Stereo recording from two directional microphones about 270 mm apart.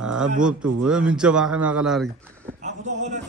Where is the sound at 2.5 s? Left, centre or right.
Right.